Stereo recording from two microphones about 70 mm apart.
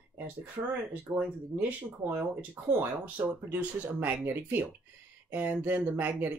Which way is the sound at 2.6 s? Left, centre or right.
Right.